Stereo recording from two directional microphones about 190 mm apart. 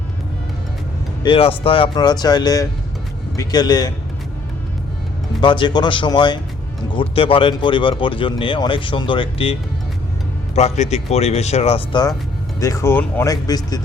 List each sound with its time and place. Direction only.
1.2 s speech: 30° left (ahead or behind)
5.4 s speech: 25° left (ahead or behind)